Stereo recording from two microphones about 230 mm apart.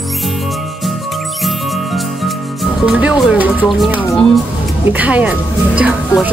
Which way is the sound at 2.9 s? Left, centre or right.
Centre.